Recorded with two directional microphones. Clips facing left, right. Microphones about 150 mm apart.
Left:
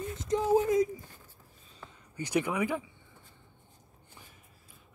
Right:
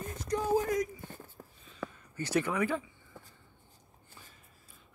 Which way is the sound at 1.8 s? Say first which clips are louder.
Right 10 dB; 90° right.